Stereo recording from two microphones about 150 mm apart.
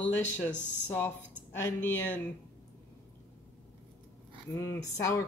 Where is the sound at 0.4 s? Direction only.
15° left (ahead or behind).